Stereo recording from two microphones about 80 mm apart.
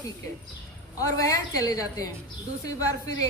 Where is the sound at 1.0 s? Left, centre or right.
Left.